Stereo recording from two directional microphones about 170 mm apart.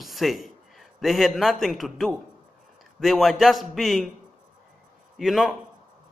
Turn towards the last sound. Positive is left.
turn(degrees=0)  # may be behind; listen again after turning